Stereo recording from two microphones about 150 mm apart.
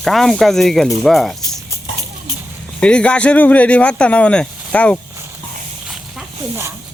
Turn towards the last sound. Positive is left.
turn(degrees=10)  # may be behind; listen again after turning